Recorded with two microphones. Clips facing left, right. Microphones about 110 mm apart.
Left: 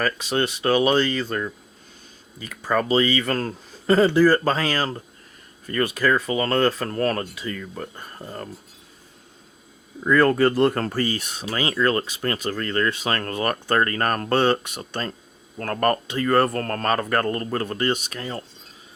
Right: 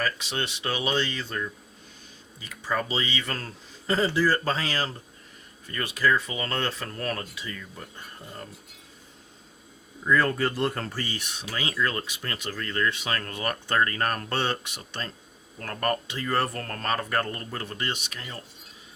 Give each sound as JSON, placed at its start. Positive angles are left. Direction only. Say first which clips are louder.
{"t": 0.0, "sound": "speech", "louder": "left 7 dB", "side_deg": 45}
{"t": 10.0, "sound": "speech", "louder": "left 7 dB", "side_deg": 60}